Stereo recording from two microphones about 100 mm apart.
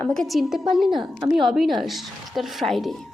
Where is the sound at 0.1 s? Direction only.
5° left (ahead or behind).